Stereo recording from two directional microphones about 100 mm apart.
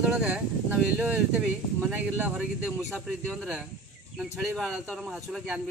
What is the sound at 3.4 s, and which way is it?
Speech, centre (ahead or behind).